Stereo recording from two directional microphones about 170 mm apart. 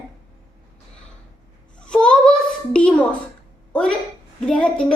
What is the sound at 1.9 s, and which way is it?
A woman's voice, 5° left (ahead or behind).